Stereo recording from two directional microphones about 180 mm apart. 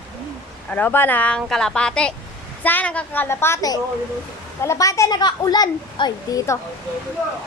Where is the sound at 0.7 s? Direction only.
10° left (ahead or behind).